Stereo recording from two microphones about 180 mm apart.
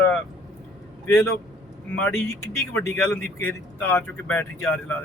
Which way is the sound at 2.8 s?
10° left (ahead or behind).